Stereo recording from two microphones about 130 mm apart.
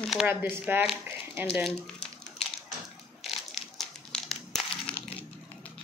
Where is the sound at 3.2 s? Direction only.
Centre (ahead or behind).